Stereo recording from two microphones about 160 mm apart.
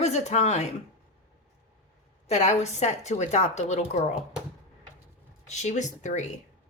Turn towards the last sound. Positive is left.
turn(degrees=50)  # may be behind; listen again after turning